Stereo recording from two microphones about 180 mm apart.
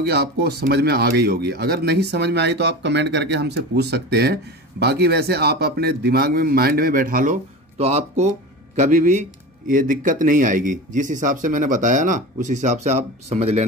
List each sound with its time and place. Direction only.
0.0 s speech: 65° right (ahead or behind); by 13.7 s 35° right (ahead or behind)